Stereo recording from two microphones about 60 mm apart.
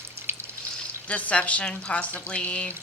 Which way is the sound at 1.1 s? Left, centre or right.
Left.